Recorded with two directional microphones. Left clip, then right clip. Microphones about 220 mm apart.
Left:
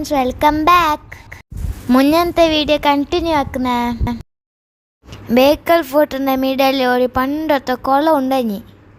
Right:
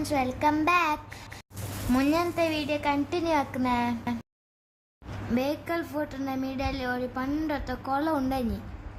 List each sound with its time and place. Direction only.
0.0 s a woman's voice: 30° left (ahead or behind)
5.3 s a woman's voice: 40° left (ahead or behind)